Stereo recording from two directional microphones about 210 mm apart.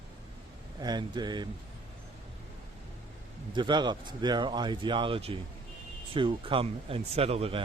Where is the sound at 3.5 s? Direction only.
20° right (ahead or behind).